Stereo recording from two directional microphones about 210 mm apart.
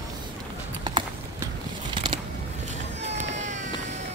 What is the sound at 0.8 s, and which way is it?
Clip-clop, 20° right (ahead or behind).